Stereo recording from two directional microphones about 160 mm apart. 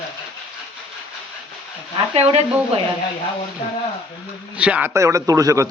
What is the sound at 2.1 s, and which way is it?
Speech, 40° right (ahead or behind).